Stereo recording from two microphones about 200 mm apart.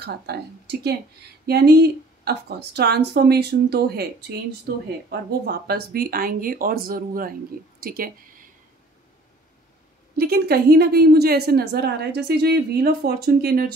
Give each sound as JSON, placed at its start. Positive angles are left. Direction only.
{"t": 0.0, "sound": "a woman's voice", "side_deg": -55}
{"t": 5.5, "sound": "a woman's voice", "side_deg": -50}
{"t": 10.1, "sound": "a woman's voice", "side_deg": -50}